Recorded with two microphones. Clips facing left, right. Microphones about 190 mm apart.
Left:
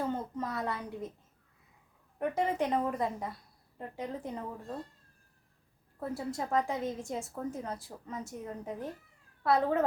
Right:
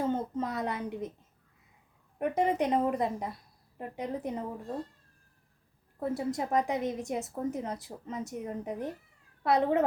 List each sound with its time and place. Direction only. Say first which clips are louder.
0.1 s a child's voice: right 4 dB; 20° right (ahead or behind)
2.1 s a woman's voice: right 3 dB; 20° right (ahead or behind)
6.0 s a woman's voice: right 4 dB; 20° right (ahead or behind)